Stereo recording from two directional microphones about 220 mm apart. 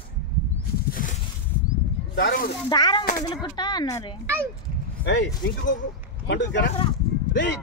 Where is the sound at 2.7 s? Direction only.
20° left (ahead or behind).